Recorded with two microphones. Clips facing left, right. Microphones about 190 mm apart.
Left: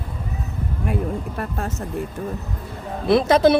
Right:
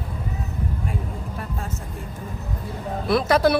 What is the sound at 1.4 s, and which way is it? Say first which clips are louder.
Speech: left 5 dB; 65° left (ahead or behind).